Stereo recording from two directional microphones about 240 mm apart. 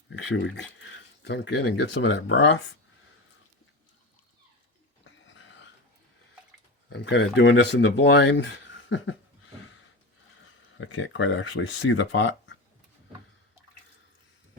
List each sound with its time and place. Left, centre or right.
0.1 s speech: left
5.0 s dog: left
6.9 s speech: left
10.8 s speech: left